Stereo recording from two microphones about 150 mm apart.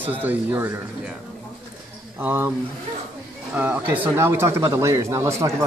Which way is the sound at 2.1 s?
15° right (ahead or behind).